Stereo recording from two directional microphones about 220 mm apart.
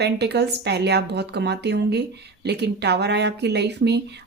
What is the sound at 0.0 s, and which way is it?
Speech, 50° right (ahead or behind).